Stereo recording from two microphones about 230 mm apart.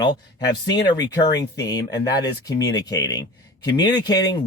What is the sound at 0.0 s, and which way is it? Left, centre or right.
Speech, centre.